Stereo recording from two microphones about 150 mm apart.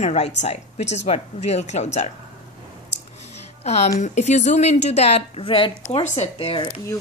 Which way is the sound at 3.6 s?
45° left (ahead or behind).